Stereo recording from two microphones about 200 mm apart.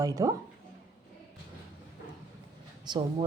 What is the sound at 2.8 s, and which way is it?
Speech, 20° right (ahead or behind).